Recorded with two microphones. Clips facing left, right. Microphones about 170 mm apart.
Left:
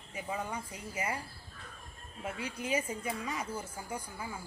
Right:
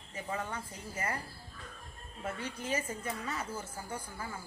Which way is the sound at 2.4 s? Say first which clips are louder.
Left 3 dB; 10° left (ahead or behind).